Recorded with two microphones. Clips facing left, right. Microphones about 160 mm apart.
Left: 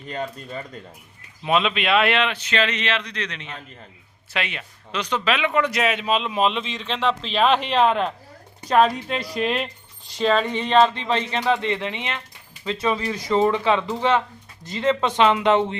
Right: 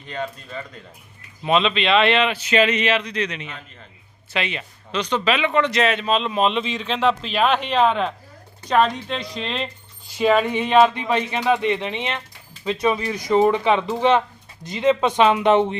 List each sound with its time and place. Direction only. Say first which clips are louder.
0.1 s speech: even; 40° left (ahead or behind)
1.5 s speech: right 2 dB; 5° left (ahead or behind)
10.1 s speech: right 3 dB; 10° right (ahead or behind)